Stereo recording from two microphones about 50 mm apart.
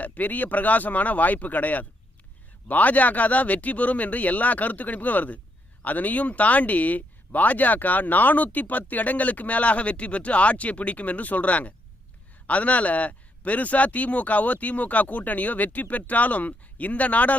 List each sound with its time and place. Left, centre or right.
0.0 s speech: left